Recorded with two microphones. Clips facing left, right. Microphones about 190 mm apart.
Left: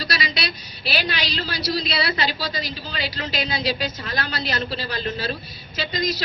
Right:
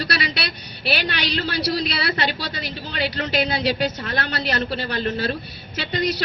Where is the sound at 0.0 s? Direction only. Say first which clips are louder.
Right 2 dB; 60° right (ahead or behind).